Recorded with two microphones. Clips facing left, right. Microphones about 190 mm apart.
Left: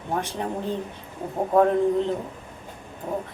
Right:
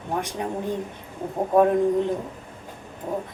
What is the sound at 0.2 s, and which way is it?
A woman's voice, 15° right (ahead or behind).